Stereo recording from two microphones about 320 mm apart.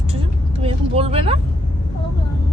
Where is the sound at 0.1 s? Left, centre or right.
Centre.